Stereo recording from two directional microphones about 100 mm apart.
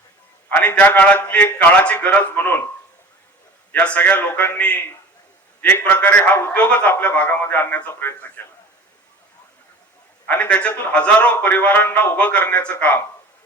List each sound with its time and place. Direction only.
0.5 s a man's voice: 20° left (ahead or behind)
3.7 s a man's voice: 15° left (ahead or behind)
10.2 s a man's voice: 15° left (ahead or behind)